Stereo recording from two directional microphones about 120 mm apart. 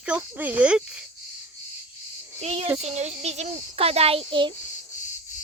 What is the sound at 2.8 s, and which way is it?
A child's voice, 70° right (ahead or behind).